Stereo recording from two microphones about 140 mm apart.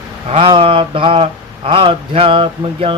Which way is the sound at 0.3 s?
40° right (ahead or behind).